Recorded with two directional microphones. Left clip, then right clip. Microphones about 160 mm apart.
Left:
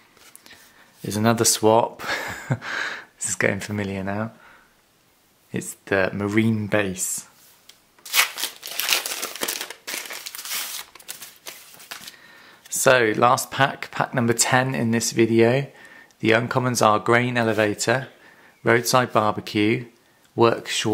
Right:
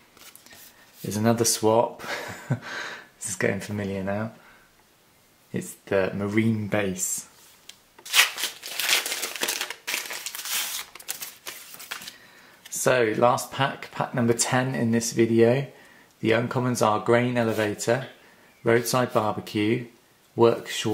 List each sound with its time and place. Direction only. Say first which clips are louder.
1.0 s speech: left 3 dB; 25° left (ahead or behind)
5.5 s speech: left 2 dB; 30° left (ahead or behind)
8.1 s shuffling cards: right 1 dB; 20° left (ahead or behind)
9.4 s crumpling: even; 10° left (ahead or behind)
12.7 s speech: left 5 dB; 30° left (ahead or behind)